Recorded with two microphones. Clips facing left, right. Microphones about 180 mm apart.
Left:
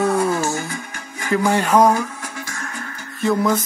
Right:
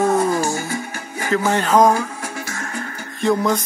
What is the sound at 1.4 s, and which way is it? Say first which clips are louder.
Speech: even; 10° left (ahead or behind).